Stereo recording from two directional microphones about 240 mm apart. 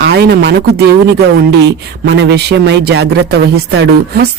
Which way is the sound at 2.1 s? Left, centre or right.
Right.